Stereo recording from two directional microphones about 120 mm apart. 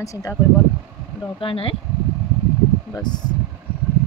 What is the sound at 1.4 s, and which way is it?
Speech, 50° left (ahead or behind).